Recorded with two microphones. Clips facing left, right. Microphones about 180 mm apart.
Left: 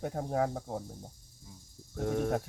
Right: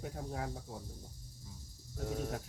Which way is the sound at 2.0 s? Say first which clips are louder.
Left 8 dB; 60° left (ahead or behind).